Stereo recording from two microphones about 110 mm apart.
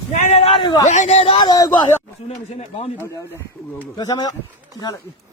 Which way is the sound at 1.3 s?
35° left (ahead or behind).